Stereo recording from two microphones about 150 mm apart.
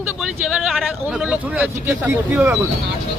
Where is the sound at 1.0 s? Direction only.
5° right (ahead or behind).